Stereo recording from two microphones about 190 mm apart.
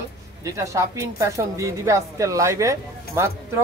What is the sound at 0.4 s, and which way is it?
A woman's voice, 15° right (ahead or behind).